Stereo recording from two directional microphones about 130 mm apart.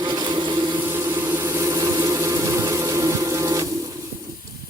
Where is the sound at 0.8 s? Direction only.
20° right (ahead or behind).